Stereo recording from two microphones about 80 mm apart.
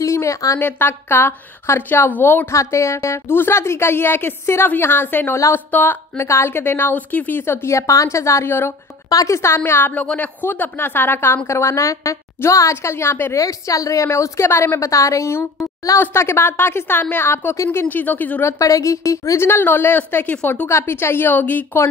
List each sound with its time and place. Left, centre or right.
0.0 s a sound: left
0.6 s a woman's voice: left
2.5 s a woman's voice: left
9.1 s a woman's voice: left
9.6 s a woman's voice: left
18.6 s a woman's voice: left